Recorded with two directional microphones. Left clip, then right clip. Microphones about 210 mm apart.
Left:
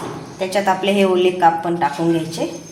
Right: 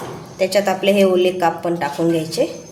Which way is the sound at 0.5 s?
20° right (ahead or behind).